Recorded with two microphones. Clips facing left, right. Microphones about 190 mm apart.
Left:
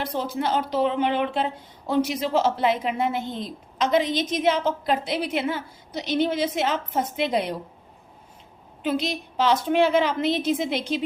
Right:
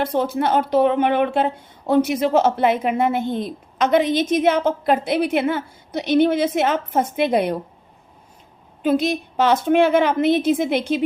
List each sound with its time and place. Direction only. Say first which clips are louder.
0.0 s speech: right 6 dB; 55° right (ahead or behind)
8.8 s a woman's voice: right 7 dB; 50° right (ahead or behind)